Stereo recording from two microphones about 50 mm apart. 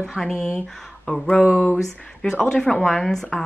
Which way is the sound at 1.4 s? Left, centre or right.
Right.